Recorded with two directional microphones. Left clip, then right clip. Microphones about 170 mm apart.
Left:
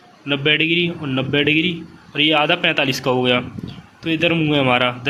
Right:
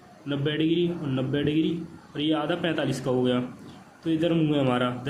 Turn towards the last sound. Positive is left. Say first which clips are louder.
# left 9 dB
turn(degrees=20)  # may be behind; listen again after turning